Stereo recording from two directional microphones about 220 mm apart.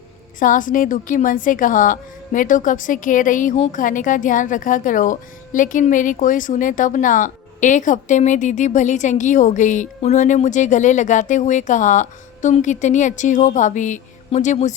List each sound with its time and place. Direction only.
0.3 s a woman's voice: 35° left (ahead or behind)